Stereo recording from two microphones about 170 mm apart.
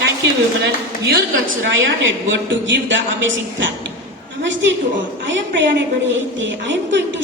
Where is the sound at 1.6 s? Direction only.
90° right.